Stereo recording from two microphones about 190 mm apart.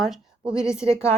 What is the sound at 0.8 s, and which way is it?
Speech, 15° left (ahead or behind).